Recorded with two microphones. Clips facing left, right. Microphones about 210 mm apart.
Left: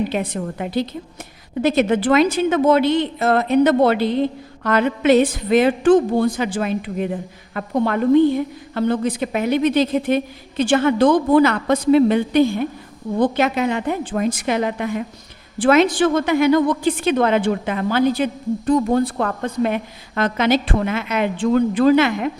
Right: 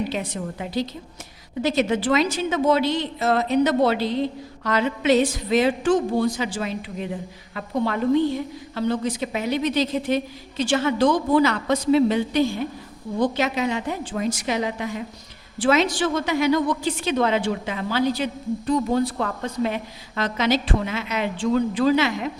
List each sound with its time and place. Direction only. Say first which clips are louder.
0.1 s a woman's voice: left 5 dB; 55° left (ahead or behind)